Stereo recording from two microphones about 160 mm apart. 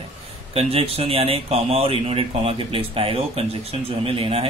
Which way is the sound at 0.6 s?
35° right (ahead or behind).